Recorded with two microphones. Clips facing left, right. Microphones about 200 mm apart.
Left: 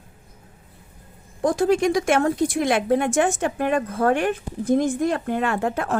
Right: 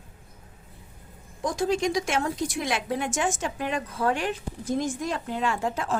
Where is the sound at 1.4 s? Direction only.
55° left (ahead or behind).